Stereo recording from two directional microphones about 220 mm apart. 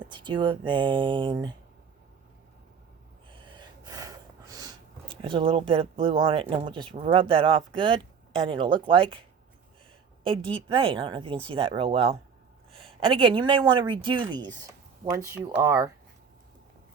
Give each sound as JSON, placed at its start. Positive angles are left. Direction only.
{"t": 0.0, "sound": "speech", "side_deg": -20}
{"t": 3.2, "sound": "gasp", "side_deg": -20}
{"t": 10.2, "sound": "speech", "side_deg": -25}